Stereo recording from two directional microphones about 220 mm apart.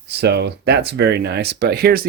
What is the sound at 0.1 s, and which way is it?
Speech, 50° right (ahead or behind).